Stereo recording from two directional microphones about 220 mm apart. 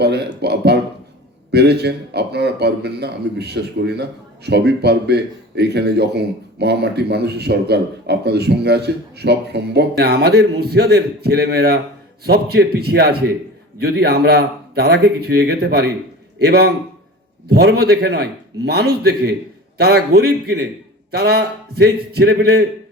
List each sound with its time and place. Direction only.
0.0 s speech: 50° right (ahead or behind)